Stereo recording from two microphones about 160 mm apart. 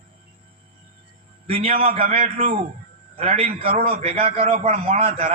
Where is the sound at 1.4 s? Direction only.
35° right (ahead or behind).